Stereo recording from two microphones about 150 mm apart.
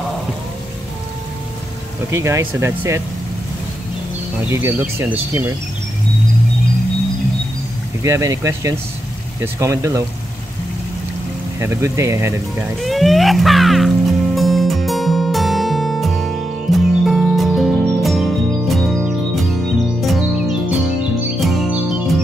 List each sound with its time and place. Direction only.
2.0 s speech: 20° right (ahead or behind)
4.5 s speech: 15° right (ahead or behind)
8.0 s speech: 20° right (ahead or behind)
11.6 s speech: 20° right (ahead or behind)
12.8 s music: centre (ahead or behind)